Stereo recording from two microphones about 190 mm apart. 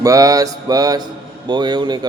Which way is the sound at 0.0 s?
20° right (ahead or behind).